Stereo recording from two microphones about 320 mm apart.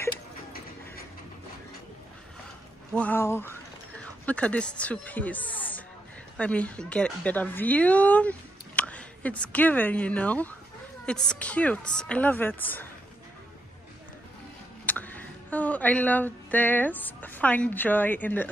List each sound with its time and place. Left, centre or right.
2.9 s a sound: centre
4.0 s a woman's voice: centre
14.9 s speech: centre